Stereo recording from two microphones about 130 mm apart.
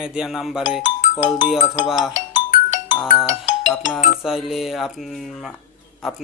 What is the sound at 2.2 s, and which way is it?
Music, 70° left (ahead or behind).